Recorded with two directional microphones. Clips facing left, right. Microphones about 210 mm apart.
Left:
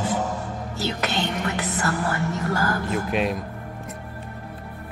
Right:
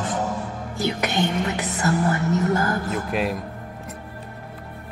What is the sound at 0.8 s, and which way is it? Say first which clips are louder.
Speech: right 3 dB; 15° right (ahead or behind).